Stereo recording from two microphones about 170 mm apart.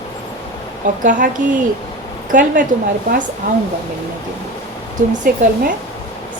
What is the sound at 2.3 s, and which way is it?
Speech, 50° right (ahead or behind).